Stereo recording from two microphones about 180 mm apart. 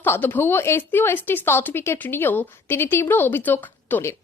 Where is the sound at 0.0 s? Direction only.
10° left (ahead or behind).